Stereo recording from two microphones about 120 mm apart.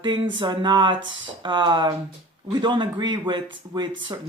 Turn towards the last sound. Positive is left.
turn(degrees=-40)  # may be behind; listen again after turning